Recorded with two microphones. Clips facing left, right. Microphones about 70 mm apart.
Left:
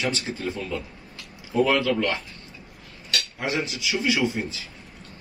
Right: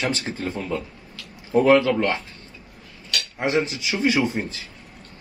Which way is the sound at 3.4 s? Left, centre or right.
Right.